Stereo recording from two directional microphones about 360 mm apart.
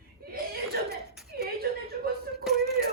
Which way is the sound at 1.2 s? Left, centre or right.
Centre.